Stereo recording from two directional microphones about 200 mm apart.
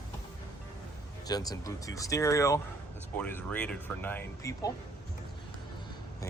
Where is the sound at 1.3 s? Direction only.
20° left (ahead or behind).